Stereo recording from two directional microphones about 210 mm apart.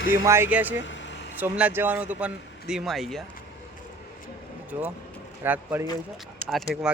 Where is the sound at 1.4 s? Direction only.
5° right (ahead or behind).